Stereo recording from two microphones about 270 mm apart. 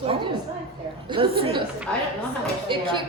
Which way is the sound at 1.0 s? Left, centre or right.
Centre.